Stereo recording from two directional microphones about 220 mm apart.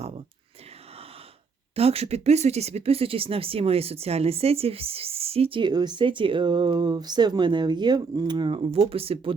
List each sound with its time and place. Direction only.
1.7 s speech: 25° right (ahead or behind)